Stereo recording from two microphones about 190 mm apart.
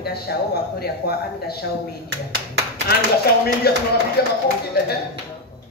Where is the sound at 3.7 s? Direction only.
55° left (ahead or behind).